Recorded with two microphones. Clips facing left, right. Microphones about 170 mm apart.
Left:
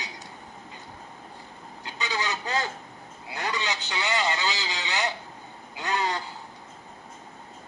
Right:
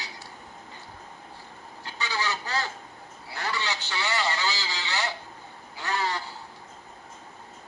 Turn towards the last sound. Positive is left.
turn(degrees=20)  # may be behind; listen again after turning